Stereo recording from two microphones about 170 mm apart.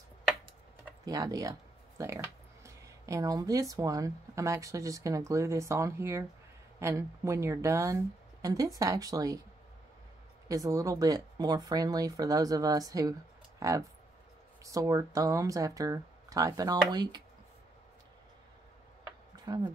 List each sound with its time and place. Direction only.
1.0 s speech: 20° right (ahead or behind)
10.5 s speech: 20° right (ahead or behind)
19.3 s a sound: 25° right (ahead or behind)